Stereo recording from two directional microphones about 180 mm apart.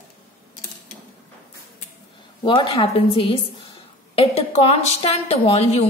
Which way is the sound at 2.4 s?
25° left (ahead or behind).